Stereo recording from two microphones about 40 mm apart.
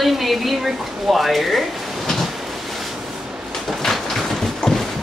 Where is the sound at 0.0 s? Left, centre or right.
Centre.